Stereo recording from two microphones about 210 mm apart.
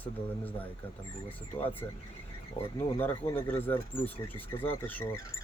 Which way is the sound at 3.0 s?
10° left (ahead or behind).